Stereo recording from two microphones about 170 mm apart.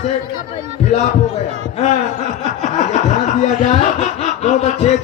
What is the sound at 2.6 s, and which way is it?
Snicker, 45° left (ahead or behind).